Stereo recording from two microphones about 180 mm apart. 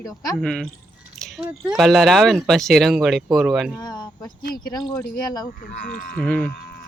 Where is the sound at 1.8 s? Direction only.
Centre (ahead or behind).